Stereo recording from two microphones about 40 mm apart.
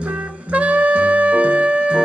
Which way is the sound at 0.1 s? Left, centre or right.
Right.